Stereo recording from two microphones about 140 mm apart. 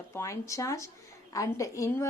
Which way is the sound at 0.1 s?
20° left (ahead or behind).